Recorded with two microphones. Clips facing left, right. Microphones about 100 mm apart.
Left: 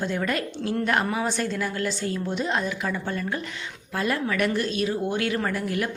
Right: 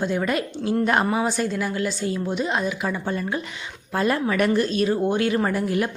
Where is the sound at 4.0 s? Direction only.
30° right (ahead or behind).